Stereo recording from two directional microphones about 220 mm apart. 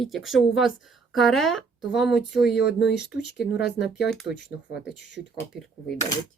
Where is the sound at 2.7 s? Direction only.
50° left (ahead or behind).